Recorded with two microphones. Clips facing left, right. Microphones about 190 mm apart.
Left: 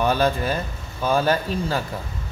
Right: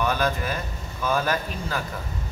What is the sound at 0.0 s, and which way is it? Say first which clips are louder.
Speech: left 4 dB; 30° left (ahead or behind).